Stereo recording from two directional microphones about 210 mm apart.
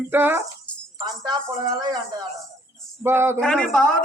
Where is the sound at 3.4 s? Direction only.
5° left (ahead or behind).